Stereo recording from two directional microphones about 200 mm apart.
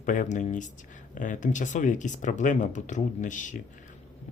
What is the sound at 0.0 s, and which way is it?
Speech, 40° left (ahead or behind).